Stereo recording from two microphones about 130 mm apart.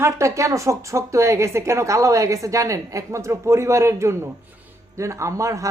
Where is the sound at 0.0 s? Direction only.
25° right (ahead or behind).